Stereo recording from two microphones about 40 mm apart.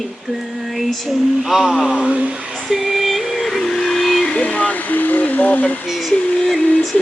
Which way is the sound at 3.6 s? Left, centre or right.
Centre.